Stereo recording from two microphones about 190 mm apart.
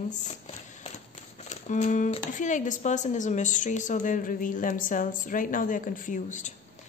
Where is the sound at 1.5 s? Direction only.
40° left (ahead or behind).